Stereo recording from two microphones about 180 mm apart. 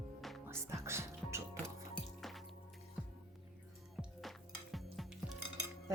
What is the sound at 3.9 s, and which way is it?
Music, centre (ahead or behind).